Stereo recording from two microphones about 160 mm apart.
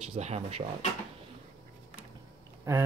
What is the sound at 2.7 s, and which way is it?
Speech, 15° right (ahead or behind).